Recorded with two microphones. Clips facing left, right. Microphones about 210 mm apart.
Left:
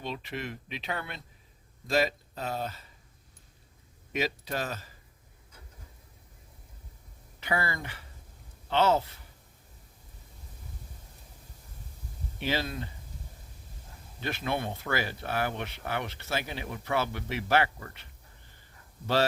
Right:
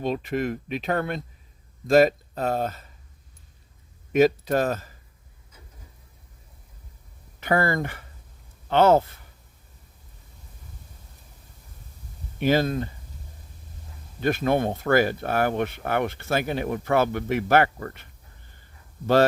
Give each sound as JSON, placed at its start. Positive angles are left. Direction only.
{"t": 0.0, "sound": "speech", "side_deg": -45}
{"t": 4.1, "sound": "speech", "side_deg": -50}
{"t": 7.3, "sound": "speech", "side_deg": -50}
{"t": 12.4, "sound": "speech", "side_deg": -50}
{"t": 14.2, "sound": "speech", "side_deg": -50}